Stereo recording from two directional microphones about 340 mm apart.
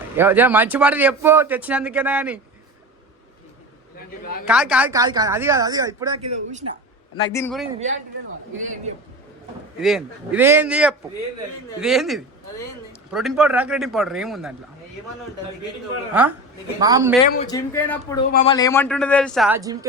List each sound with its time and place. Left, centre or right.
0.2 s speech: centre
3.9 s a man's voice: left
4.4 s speech: centre
7.3 s speech: centre
9.8 s speech: centre
16.1 s speech: centre
17.5 s a man's voice: centre
18.3 s a man's voice: left
18.5 s speech: centre